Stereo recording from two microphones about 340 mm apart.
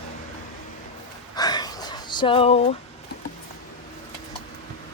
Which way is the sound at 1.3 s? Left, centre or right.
Centre.